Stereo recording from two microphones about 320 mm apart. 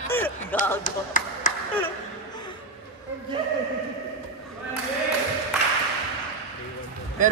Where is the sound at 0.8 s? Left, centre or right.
Left.